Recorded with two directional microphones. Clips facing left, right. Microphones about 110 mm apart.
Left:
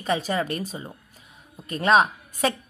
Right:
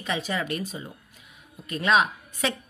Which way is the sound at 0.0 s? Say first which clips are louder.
Left 4 dB; 40° left (ahead or behind).